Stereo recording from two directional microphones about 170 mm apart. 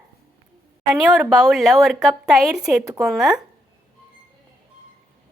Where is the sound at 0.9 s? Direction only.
5° right (ahead or behind).